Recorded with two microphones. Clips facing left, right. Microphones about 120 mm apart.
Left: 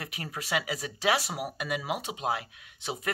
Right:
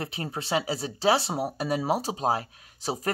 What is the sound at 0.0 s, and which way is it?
Speech, 30° right (ahead or behind).